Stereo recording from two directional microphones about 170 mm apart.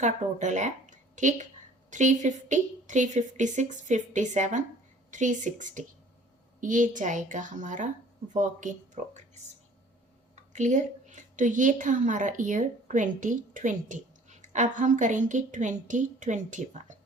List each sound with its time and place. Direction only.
0.0 s a woman's voice: 45° right (ahead or behind)
10.3 s a woman's voice: 45° right (ahead or behind)